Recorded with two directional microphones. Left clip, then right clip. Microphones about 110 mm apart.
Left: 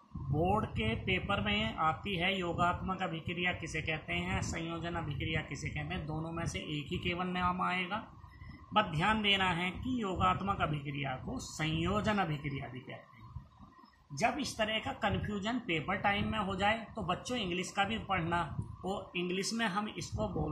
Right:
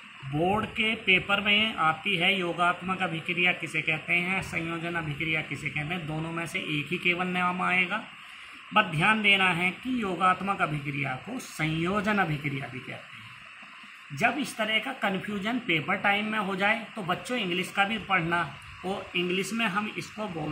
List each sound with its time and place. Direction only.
0.5 s speech: 35° left (ahead or behind)
14.6 s speech: 30° left (ahead or behind)